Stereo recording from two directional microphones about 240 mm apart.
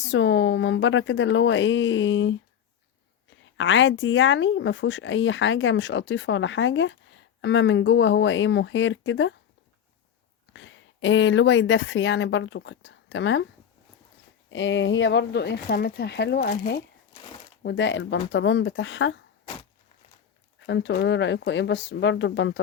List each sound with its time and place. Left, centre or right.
0.1 s speech: left
10.5 s speech: left
14.5 s speech: left
20.7 s speech: left